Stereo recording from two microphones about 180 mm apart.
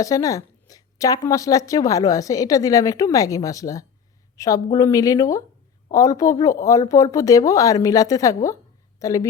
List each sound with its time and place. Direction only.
0.0 s a woman's voice: 20° left (ahead or behind)